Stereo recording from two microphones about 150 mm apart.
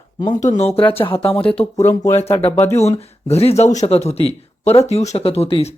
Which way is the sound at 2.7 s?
45° left (ahead or behind).